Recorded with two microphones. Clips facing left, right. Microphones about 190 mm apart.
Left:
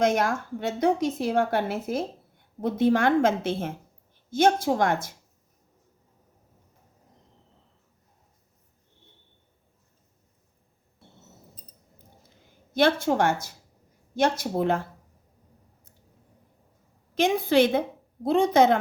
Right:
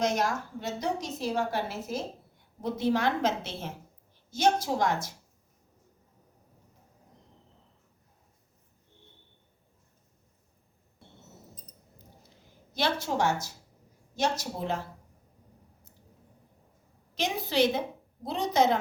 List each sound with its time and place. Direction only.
0.0 s a woman's voice: 55° left (ahead or behind)
12.7 s a woman's voice: 55° left (ahead or behind)
17.2 s a woman's voice: 55° left (ahead or behind)